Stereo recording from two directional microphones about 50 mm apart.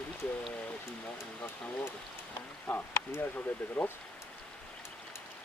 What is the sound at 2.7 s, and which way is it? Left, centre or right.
Speech, centre.